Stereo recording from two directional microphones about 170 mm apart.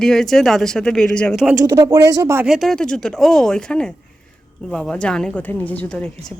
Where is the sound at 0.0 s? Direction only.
Centre (ahead or behind).